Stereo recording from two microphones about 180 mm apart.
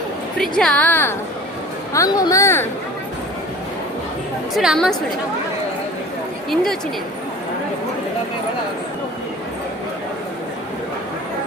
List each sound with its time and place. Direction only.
0.3 s a woman's voice: 5° left (ahead or behind)
4.5 s a woman's voice: centre (ahead or behind)
6.5 s a woman's voice: centre (ahead or behind)